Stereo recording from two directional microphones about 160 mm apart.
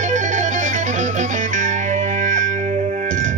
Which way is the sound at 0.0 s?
50° right (ahead or behind).